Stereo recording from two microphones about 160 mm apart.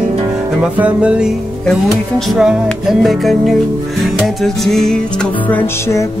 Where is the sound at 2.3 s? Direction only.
5° right (ahead or behind).